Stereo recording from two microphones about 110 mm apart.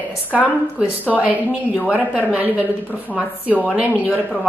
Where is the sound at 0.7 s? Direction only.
15° right (ahead or behind).